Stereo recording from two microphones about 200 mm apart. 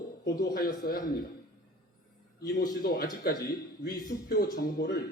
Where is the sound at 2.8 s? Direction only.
50° left (ahead or behind).